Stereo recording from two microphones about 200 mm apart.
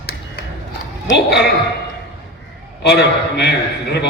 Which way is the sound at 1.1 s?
55° left (ahead or behind).